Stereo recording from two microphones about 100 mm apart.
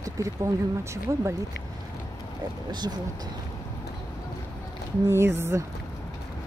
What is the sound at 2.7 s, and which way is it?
Speech, 45° right (ahead or behind).